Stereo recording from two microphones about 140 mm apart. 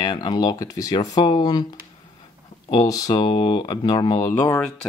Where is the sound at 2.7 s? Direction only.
25° left (ahead or behind).